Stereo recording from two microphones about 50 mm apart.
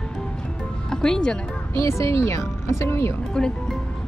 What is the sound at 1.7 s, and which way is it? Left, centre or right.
Speech, left.